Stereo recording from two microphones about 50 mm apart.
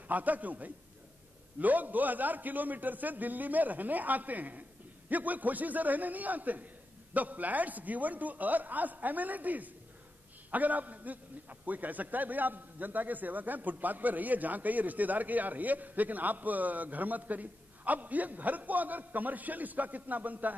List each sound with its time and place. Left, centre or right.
0.1 s a man's voice: right